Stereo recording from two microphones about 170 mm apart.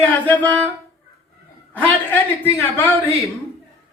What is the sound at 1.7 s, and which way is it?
A woman's voice, 10° left (ahead or behind).